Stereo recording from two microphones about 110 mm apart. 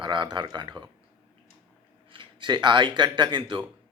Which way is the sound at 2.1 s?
50° right (ahead or behind).